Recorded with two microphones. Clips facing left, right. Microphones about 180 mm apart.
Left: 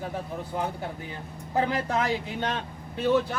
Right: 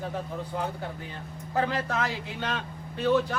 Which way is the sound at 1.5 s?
15° left (ahead or behind).